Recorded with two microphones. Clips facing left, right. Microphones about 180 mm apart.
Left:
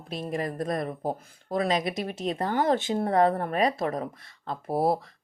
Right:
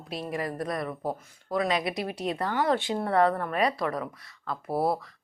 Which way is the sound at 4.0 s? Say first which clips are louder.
Left 1 dB; 25° left (ahead or behind).